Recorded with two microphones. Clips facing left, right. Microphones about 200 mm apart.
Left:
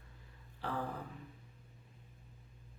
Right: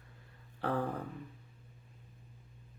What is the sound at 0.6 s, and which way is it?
Speech, 60° right (ahead or behind).